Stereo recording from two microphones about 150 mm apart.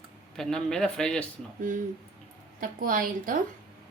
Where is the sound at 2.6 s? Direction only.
65° right (ahead or behind).